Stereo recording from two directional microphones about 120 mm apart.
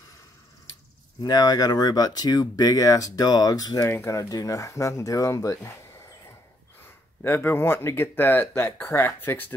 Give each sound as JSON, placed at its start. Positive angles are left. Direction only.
{"t": 1.2, "sound": "speech", "side_deg": 30}
{"t": 7.2, "sound": "speech", "side_deg": 20}